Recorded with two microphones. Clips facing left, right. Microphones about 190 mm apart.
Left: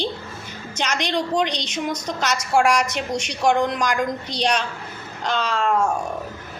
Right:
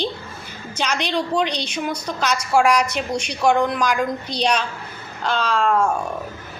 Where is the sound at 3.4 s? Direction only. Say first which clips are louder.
Right 1 dB; 15° left (ahead or behind).